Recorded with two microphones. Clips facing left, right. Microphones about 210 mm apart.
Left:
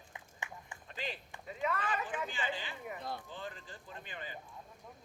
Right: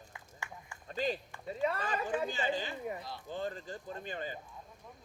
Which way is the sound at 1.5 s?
35° right (ahead or behind).